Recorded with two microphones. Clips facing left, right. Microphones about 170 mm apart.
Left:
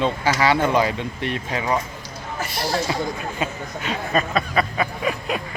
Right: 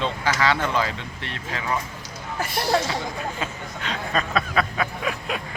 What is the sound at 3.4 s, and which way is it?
Speech, 10° left (ahead or behind).